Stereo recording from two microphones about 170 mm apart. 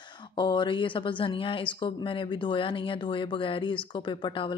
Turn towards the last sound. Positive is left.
turn(degrees=30)  # may be behind; listen again after turning